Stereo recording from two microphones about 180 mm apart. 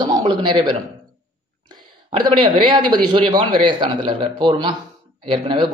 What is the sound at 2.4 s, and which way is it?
A man's voice, 30° right (ahead or behind).